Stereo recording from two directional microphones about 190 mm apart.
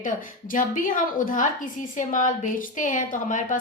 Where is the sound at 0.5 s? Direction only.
45° left (ahead or behind).